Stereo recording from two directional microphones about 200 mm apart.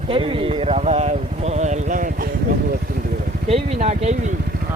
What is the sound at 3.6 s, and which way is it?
Speech, 30° right (ahead or behind).